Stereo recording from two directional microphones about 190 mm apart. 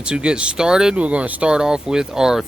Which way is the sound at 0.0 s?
5° right (ahead or behind).